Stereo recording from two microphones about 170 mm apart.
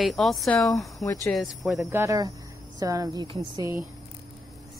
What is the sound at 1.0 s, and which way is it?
Speech, 20° left (ahead or behind).